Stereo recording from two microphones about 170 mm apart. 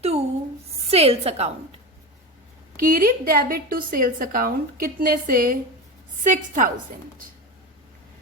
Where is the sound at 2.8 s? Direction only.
55° right (ahead or behind).